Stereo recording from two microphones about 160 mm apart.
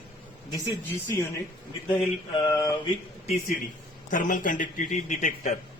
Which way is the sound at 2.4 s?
20° left (ahead or behind).